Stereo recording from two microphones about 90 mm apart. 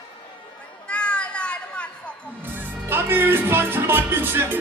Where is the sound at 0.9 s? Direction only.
10° left (ahead or behind).